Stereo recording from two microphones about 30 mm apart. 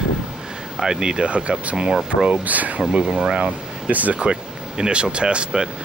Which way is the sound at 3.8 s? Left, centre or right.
Right.